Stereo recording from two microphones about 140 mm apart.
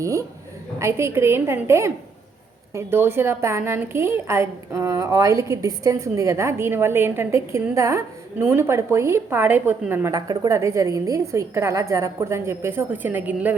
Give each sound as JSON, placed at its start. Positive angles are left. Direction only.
{"t": 0.0, "sound": "a woman's voice", "side_deg": -20}
{"t": 10.2, "sound": "a woman's voice", "side_deg": -25}